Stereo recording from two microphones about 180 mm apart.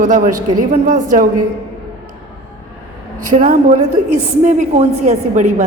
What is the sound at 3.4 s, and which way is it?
A woman's voice, 40° right (ahead or behind).